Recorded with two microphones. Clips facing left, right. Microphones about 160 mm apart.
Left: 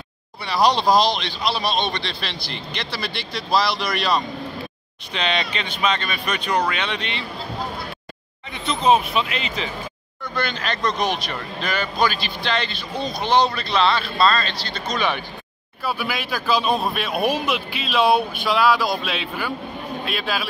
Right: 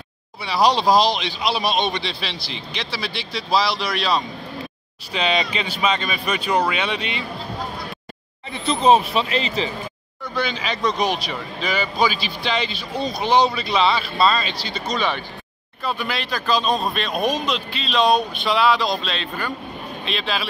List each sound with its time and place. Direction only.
0.4 s speech: 5° right (ahead or behind)
8.5 s speech: 30° right (ahead or behind)
10.2 s speech: 5° right (ahead or behind)
15.8 s speech: 5° left (ahead or behind)